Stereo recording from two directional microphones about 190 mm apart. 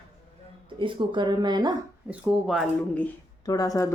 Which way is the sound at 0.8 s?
25° right (ahead or behind).